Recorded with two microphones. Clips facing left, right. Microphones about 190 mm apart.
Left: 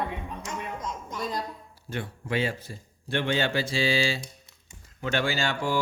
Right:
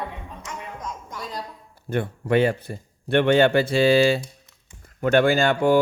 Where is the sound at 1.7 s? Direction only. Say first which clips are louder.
Right 10 dB; 55° right (ahead or behind).